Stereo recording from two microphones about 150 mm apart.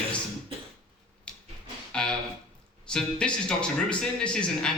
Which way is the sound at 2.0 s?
5° left (ahead or behind).